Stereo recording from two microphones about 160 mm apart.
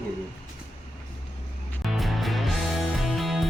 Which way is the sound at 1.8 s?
Centre (ahead or behind).